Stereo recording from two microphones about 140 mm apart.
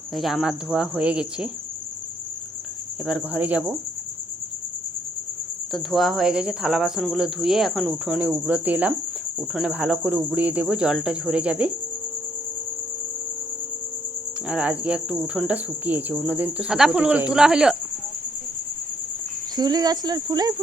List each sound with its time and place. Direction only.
0.2 s speech: centre (ahead or behind)
3.1 s cricket: 10° right (ahead or behind)
5.7 s speech: centre (ahead or behind)
9.5 s cricket: 10° right (ahead or behind)
14.4 s cricket: 10° right (ahead or behind)
19.5 s speech: 30° right (ahead or behind)